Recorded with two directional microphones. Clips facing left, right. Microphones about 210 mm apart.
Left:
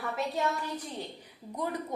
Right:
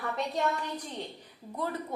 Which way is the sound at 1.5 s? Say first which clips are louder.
Even; 15° left (ahead or behind).